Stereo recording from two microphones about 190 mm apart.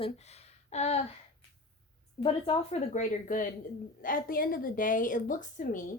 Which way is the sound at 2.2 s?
30° left (ahead or behind).